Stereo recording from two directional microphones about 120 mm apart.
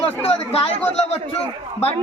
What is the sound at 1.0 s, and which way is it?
Speech, 60° left (ahead or behind).